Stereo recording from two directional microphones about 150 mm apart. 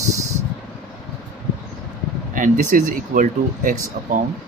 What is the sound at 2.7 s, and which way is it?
Speech, 60° right (ahead or behind).